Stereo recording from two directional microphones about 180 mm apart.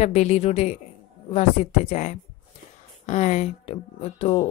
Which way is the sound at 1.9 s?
40° left (ahead or behind).